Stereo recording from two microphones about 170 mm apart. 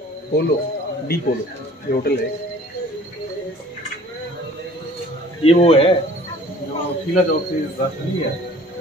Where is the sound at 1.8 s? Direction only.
60° left (ahead or behind).